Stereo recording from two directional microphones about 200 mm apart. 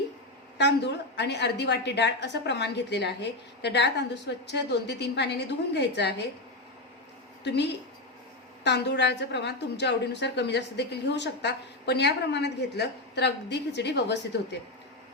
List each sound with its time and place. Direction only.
0.6 s a woman's voice: 60° left (ahead or behind)
7.4 s a woman's voice: 60° left (ahead or behind)